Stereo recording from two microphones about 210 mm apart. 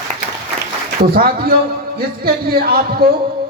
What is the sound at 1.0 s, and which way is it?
Speech, 45° right (ahead or behind).